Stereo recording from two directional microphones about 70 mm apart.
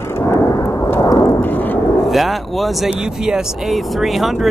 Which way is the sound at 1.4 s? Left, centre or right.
Left.